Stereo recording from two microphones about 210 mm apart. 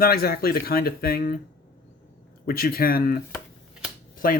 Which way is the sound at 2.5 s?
45° left (ahead or behind).